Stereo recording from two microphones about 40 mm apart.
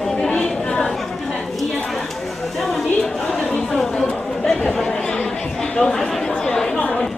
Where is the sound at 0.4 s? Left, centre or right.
Left.